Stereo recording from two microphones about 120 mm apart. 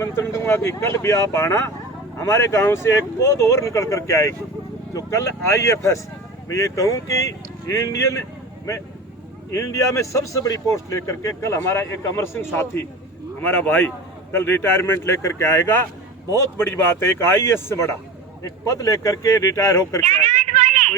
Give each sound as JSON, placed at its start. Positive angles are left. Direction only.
{"t": 0.0, "sound": "speech", "side_deg": 25}
{"t": 9.5, "sound": "speech", "side_deg": 25}
{"t": 20.1, "sound": "a sound", "side_deg": -75}